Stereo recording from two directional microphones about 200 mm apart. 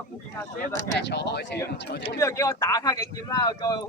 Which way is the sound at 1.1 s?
55° left (ahead or behind).